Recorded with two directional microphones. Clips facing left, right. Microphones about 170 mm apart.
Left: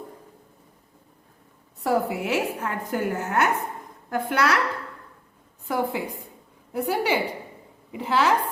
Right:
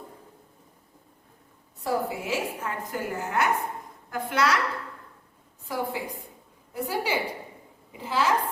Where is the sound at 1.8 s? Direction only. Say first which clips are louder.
Left 4 dB; 65° left (ahead or behind).